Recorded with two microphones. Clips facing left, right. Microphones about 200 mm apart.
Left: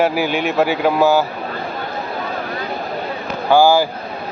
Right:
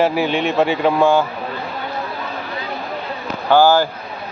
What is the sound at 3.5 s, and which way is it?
Speech, 10° left (ahead or behind).